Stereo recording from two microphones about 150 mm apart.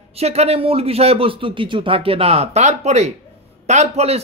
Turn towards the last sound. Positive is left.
turn(degrees=-45)  # may be behind; listen again after turning